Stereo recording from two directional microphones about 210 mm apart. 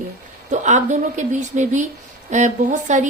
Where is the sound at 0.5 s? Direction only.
35° right (ahead or behind).